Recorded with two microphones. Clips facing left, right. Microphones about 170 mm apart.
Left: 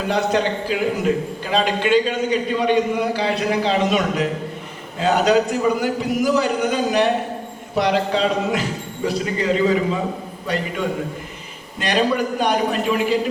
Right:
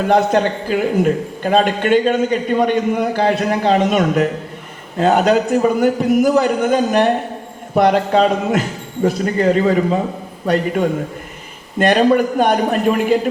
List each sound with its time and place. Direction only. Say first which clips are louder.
0.1 s a man's voice: right 5 dB; 50° right (ahead or behind)